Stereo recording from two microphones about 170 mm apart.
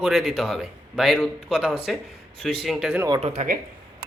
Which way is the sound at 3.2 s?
40° right (ahead or behind).